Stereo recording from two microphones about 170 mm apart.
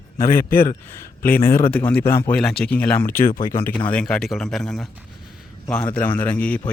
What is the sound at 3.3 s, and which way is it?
Speech, 55° left (ahead or behind).